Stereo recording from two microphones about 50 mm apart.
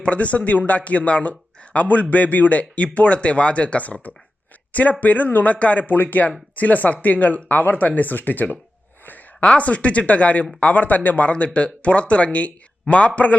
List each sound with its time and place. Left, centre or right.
0.0 s speech: left
9.4 s speech: left